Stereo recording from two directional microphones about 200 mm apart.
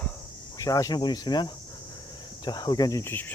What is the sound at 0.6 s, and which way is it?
Speech, 15° left (ahead or behind).